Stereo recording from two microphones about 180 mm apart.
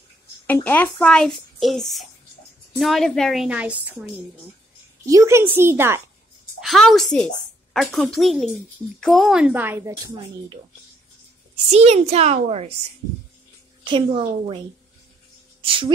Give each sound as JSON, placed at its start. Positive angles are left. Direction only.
{"t": 0.5, "sound": "a child's voice", "side_deg": 10}
{"t": 5.0, "sound": "a woman's voice", "side_deg": -15}
{"t": 6.6, "sound": "a child's voice", "side_deg": 0}
{"t": 11.7, "sound": "a child's voice", "side_deg": -35}
{"t": 13.8, "sound": "a woman's voice", "side_deg": -30}
{"t": 15.6, "sound": "speech", "side_deg": -30}